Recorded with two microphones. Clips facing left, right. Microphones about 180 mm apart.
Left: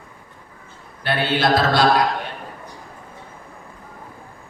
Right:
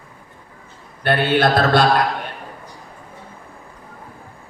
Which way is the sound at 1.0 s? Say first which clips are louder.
Right 4 dB; 55° right (ahead or behind).